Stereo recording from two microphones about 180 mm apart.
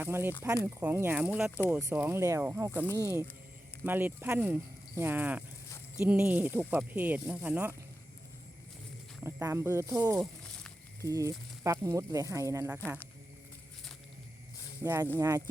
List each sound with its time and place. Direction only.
0.0 s speech: 10° right (ahead or behind)
9.2 s speech: 15° right (ahead or behind)
10.2 s a sound: 5° left (ahead or behind)
11.0 s speech: 20° right (ahead or behind)
14.8 s speech: 15° right (ahead or behind)